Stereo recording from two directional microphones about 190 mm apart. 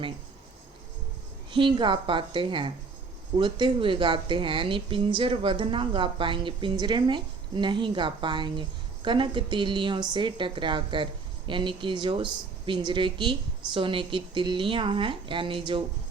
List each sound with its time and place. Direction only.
1.5 s a woman's voice: 25° right (ahead or behind)